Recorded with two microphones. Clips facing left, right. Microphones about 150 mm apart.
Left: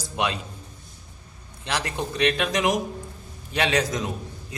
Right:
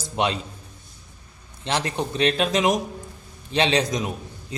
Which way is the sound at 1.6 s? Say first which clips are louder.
Right 3 dB; 25° right (ahead or behind).